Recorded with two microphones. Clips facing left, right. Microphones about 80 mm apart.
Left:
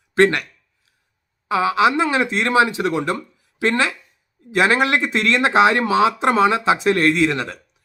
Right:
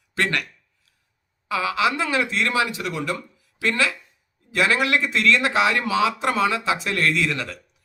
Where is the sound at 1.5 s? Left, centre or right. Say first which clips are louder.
Left 6 dB; left.